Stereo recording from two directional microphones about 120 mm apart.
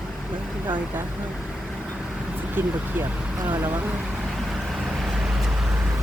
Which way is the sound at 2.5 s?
20° right (ahead or behind).